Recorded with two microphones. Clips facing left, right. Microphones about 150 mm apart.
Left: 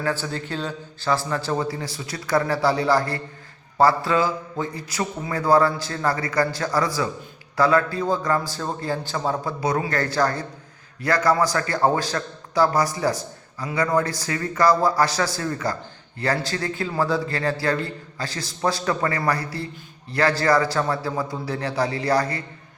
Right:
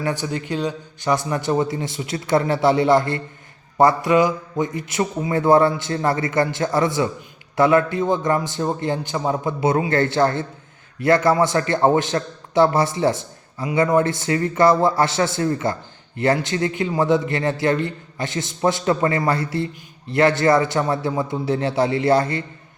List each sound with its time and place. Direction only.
0.0 s a man's voice: 15° right (ahead or behind)